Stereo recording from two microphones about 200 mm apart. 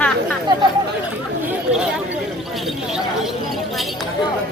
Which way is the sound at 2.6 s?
Centre (ahead or behind).